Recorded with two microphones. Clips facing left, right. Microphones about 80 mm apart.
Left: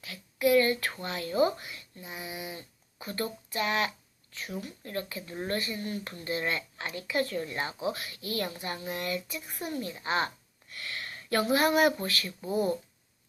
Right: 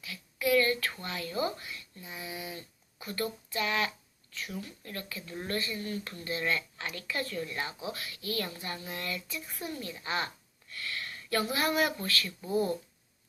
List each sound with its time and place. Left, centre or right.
0.0 s a child's voice: left